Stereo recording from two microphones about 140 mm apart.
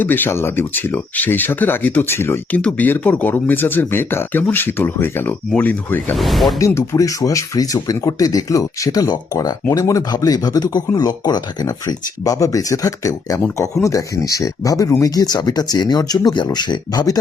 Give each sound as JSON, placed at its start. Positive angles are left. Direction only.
{"t": 0.0, "sound": "speech", "side_deg": 15}
{"t": 6.1, "sound": "speech", "side_deg": 0}
{"t": 6.6, "sound": "speech", "side_deg": 20}